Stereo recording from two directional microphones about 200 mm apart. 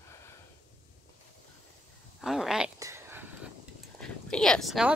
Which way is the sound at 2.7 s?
15° right (ahead or behind).